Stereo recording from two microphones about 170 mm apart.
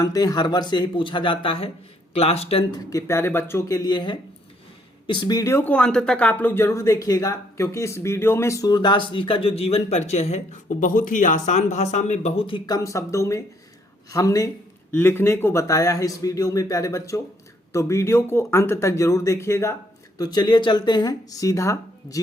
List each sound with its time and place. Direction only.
0.0 s speech: 20° left (ahead or behind)
2.7 s speech: 15° left (ahead or behind)